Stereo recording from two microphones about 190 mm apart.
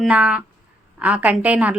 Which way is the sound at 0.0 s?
5° right (ahead or behind).